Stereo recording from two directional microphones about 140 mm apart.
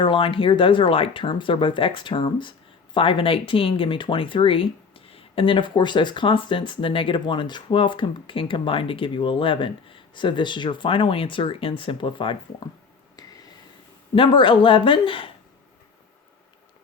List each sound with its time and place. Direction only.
0.0 s speech: 40° left (ahead or behind)
13.1 s a sound: 25° left (ahead or behind)
14.2 s speech: 35° left (ahead or behind)